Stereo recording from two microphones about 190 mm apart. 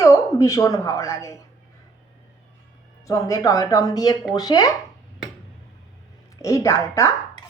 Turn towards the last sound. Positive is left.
turn(degrees=15)  # may be behind; listen again after turning